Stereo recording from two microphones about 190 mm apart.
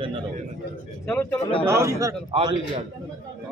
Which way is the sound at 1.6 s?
15° right (ahead or behind).